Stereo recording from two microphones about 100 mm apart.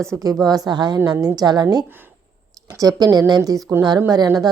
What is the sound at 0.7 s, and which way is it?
Speech, 45° right (ahead or behind).